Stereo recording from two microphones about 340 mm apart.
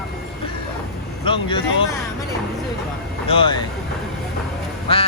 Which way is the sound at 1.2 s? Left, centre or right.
Centre.